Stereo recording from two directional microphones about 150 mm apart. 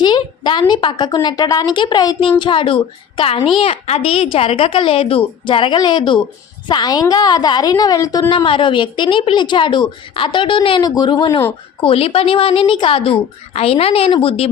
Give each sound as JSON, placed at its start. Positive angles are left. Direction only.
{"t": 0.0, "sound": "a sound", "side_deg": 30}
{"t": 0.7, "sound": "a woman's voice", "side_deg": 30}
{"t": 8.3, "sound": "a woman's voice", "side_deg": 35}